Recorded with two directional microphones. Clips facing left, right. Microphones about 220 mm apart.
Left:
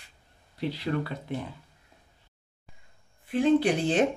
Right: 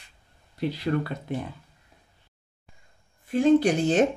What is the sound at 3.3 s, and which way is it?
Speech, 45° right (ahead or behind).